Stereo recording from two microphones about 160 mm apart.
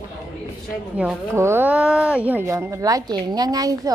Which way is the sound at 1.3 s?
15° right (ahead or behind).